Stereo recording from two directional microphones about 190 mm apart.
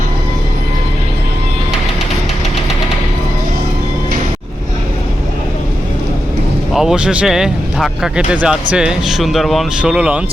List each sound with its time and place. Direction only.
6.7 s speech: 5° right (ahead or behind)